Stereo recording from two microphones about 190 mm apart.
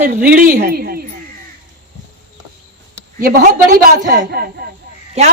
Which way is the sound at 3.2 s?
50° right (ahead or behind).